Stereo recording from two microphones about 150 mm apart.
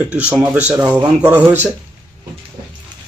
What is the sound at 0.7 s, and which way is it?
Speech, 15° right (ahead or behind).